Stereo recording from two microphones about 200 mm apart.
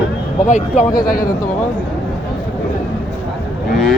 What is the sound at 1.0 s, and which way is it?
Speech, 45° left (ahead or behind).